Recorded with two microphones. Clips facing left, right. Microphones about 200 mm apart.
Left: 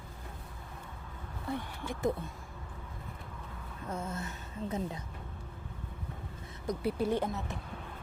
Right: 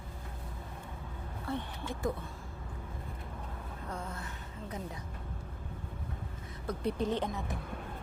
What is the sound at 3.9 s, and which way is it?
Gasp, 25° left (ahead or behind).